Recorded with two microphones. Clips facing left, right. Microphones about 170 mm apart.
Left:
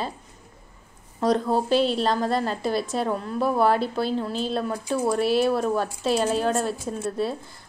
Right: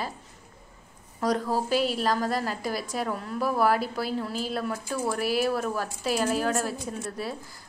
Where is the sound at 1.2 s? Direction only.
25° left (ahead or behind).